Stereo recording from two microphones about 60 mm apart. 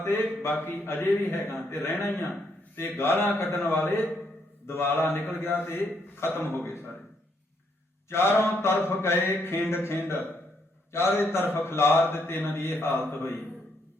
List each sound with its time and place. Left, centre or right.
0.0 s a man's voice: left
8.1 s mantra: left
8.6 s a man's voice: left